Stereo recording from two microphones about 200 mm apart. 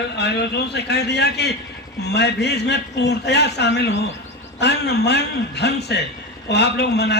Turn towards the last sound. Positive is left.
turn(degrees=55)  # may be behind; listen again after turning